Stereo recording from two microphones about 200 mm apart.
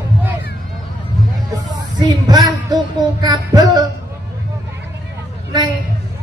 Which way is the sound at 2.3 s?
20° right (ahead or behind).